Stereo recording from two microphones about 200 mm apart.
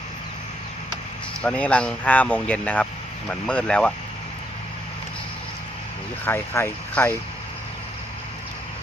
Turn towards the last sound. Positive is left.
turn(degrees=10)  # may be behind; listen again after turning